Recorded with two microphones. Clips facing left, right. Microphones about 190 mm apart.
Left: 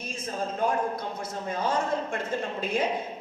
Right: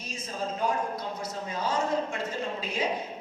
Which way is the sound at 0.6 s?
55° left (ahead or behind).